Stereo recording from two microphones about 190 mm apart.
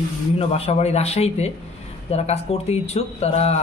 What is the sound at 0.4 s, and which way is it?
Speech, 35° left (ahead or behind).